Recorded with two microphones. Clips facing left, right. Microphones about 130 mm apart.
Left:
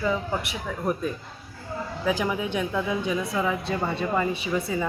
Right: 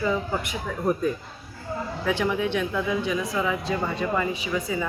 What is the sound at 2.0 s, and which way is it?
Speech, 10° left (ahead or behind).